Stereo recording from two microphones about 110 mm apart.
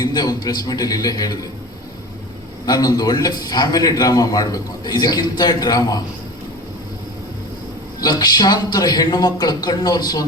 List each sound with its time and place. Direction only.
0.0 s a man's voice: 35° left (ahead or behind)
2.6 s a man's voice: 35° left (ahead or behind)
8.0 s a man's voice: 40° left (ahead or behind)